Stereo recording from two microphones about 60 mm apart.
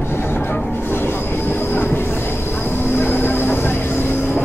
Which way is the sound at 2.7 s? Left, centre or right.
Left.